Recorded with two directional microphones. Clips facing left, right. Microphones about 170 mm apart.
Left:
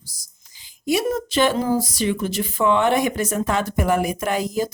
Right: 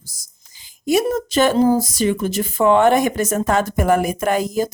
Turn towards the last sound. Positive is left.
turn(degrees=-45)  # may be behind; listen again after turning